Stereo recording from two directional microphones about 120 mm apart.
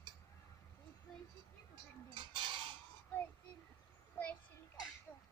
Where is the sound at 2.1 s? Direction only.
40° right (ahead or behind).